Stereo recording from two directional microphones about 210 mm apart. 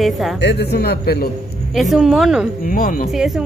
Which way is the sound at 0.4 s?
55° left (ahead or behind).